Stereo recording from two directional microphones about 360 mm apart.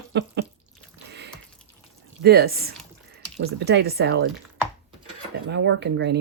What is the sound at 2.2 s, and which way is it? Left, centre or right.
Speech, right.